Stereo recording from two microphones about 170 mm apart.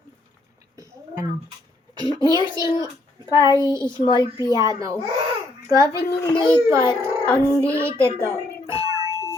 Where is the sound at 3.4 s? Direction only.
20° right (ahead or behind).